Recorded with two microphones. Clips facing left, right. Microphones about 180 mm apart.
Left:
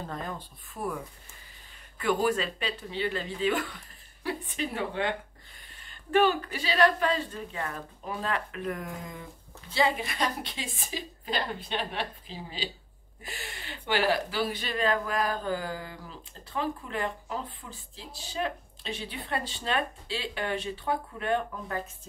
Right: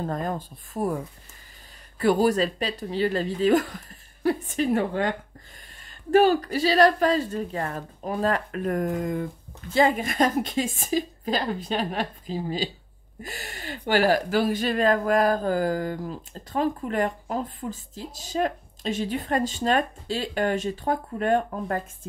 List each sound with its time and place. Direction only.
0.0 s speech: 45° right (ahead or behind)
6.1 s speech: 40° right (ahead or behind)